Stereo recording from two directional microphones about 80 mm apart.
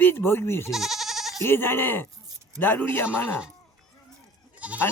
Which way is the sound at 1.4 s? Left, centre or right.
Left.